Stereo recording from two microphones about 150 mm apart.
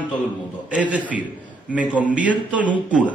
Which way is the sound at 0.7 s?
10° right (ahead or behind).